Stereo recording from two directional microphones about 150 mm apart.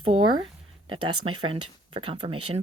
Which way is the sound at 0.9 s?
35° right (ahead or behind).